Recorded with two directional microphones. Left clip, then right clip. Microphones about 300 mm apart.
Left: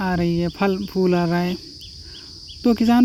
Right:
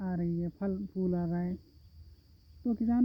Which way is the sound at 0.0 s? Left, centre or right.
Centre.